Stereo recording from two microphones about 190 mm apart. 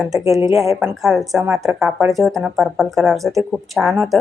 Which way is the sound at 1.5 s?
15° right (ahead or behind).